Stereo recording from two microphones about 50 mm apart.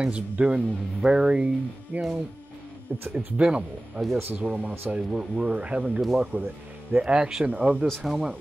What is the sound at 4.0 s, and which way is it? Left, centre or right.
Speech, right.